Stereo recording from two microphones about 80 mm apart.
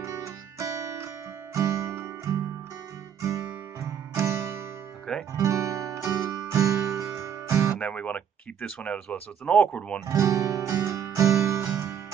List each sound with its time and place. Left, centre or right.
0.0 s music: right
3.2 s guitar: right
3.8 s music: right
6.5 s guitar: right
7.8 s speech: centre
10.0 s music: right